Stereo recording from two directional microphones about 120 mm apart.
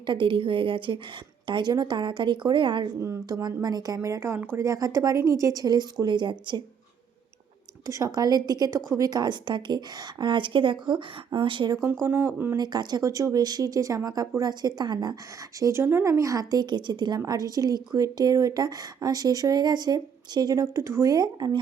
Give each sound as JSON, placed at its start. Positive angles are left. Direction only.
{"t": 0.0, "sound": "a woman's voice", "side_deg": -45}
{"t": 3.0, "sound": "speech", "side_deg": -25}
{"t": 7.9, "sound": "speech", "side_deg": -25}
{"t": 12.0, "sound": "speech", "side_deg": -20}
{"t": 12.5, "sound": "speech", "side_deg": -35}
{"t": 15.6, "sound": "speech", "side_deg": -20}